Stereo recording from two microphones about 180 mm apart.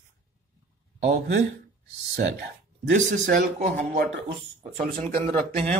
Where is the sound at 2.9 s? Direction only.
45° right (ahead or behind).